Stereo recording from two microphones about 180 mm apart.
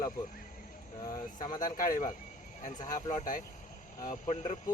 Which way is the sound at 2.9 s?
45° left (ahead or behind).